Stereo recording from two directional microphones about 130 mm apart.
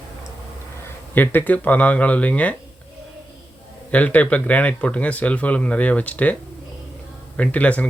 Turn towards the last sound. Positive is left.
turn(degrees=10)  # may be behind; listen again after turning